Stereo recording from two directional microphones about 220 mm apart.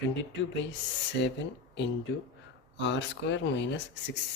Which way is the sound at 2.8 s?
55° left (ahead or behind).